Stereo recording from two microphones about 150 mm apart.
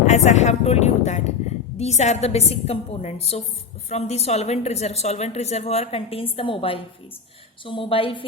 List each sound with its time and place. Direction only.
0.0 s a woman's voice: 50° left (ahead or behind)